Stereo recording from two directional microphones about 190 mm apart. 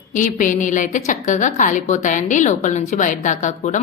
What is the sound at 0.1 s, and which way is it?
A woman's voice, 45° left (ahead or behind).